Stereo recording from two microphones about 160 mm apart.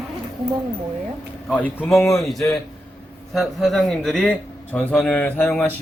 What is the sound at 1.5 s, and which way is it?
Speech, 10° left (ahead or behind).